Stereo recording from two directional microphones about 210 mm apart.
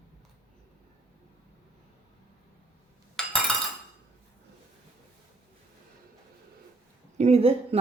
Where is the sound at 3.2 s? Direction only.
Centre (ahead or behind).